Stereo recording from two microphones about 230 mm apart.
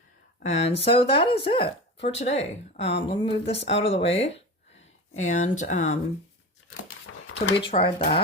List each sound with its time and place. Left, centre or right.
0.4 s speech: left
5.1 s speech: left
7.3 s speech: left